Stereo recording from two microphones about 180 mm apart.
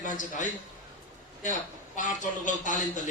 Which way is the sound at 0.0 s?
45° left (ahead or behind).